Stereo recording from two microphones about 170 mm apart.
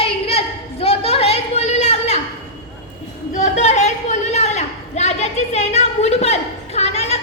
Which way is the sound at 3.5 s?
40° left (ahead or behind).